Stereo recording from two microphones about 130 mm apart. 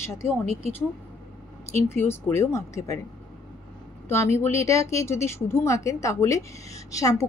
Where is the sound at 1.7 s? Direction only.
20° left (ahead or behind).